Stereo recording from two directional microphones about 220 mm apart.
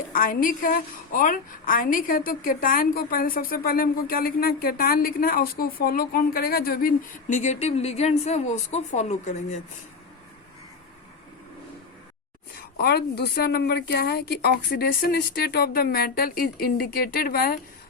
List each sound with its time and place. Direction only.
0.1 s a woman's voice: 40° left (ahead or behind)
12.8 s speech: 45° left (ahead or behind)